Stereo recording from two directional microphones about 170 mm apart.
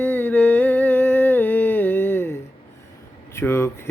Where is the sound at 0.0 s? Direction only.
10° left (ahead or behind).